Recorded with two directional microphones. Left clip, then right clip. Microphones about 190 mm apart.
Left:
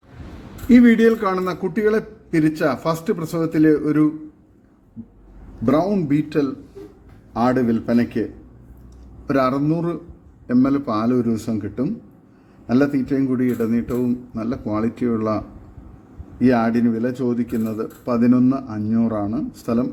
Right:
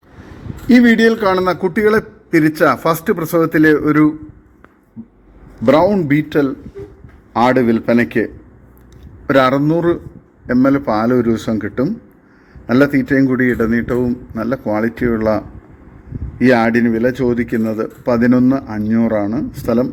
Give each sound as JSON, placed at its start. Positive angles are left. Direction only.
{"t": 0.7, "sound": "a man's voice", "side_deg": -15}
{"t": 5.6, "sound": "a man's voice", "side_deg": -10}
{"t": 7.4, "sound": "a man's voice", "side_deg": -15}
{"t": 9.6, "sound": "a man's voice", "side_deg": -15}
{"t": 13.1, "sound": "a man's voice", "side_deg": -15}
{"t": 16.4, "sound": "a man's voice", "side_deg": -15}